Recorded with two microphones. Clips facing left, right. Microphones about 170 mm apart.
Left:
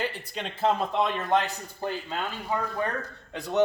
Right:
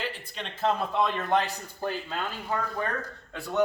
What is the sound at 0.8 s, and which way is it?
A man's voice, 15° left (ahead or behind).